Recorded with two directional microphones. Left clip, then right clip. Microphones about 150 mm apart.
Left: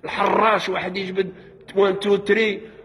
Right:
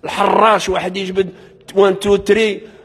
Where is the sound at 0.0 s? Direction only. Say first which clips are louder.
Right 6 dB; 30° right (ahead or behind).